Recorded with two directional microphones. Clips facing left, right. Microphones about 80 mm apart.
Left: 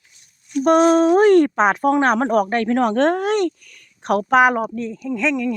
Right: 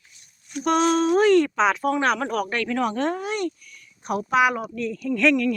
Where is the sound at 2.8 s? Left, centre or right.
Left.